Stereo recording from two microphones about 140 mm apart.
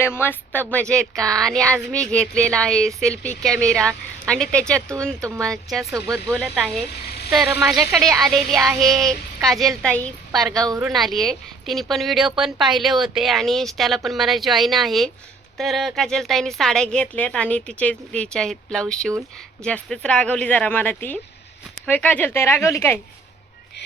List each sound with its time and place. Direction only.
0.0 s a woman's voice: 15° left (ahead or behind)
5.9 s speech: 25° right (ahead or behind)
6.3 s speech: centre (ahead or behind)
8.2 s speech: centre (ahead or behind)
10.8 s a woman's voice: 5° right (ahead or behind); by 23.0 s 20° left (ahead or behind)